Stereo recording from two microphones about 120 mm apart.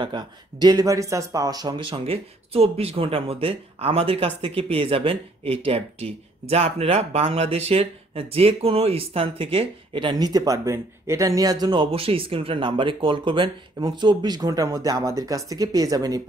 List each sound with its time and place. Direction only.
0.0 s speech: 35° right (ahead or behind)
1.9 s speech: 55° right (ahead or behind); by 11.5 s 30° right (ahead or behind)
11.6 s speech: 45° right (ahead or behind)